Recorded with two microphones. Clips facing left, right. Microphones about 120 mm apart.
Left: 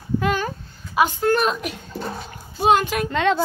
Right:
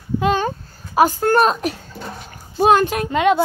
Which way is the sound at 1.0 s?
40° right (ahead or behind).